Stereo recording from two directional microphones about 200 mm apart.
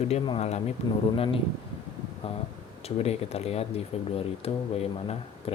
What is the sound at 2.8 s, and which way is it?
Speech, 30° left (ahead or behind).